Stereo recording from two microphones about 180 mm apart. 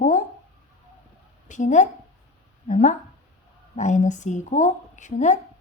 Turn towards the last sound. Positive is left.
turn(degrees=40)  # may be behind; listen again after turning